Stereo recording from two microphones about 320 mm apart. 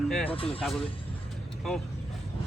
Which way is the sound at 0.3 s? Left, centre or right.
Centre.